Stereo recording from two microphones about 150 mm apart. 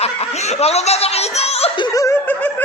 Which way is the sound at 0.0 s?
45° left (ahead or behind).